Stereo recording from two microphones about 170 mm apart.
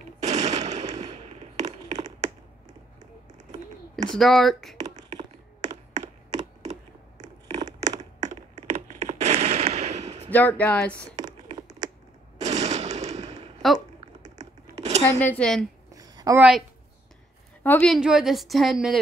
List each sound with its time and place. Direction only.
0.2 s machine gun: 40° right (ahead or behind)
1.2 s tap: 40° right (ahead or behind)
4.1 s a woman's voice: centre (ahead or behind)
5.9 s computer keyboard: 40° right (ahead or behind)
7.8 s a sound: 45° right (ahead or behind)
10.3 s speech: 10° left (ahead or behind)
11.1 s a sound: 20° right (ahead or behind)
12.4 s machine gun: 40° right (ahead or behind)
14.2 s typing: 40° right (ahead or behind)
14.8 s a sound: 40° right (ahead or behind)
15.0 s speech: 10° left (ahead or behind)
15.9 s a sound: 20° right (ahead or behind)
16.3 s a woman's voice: 5° right (ahead or behind)
17.6 s a woman's voice: 5° left (ahead or behind)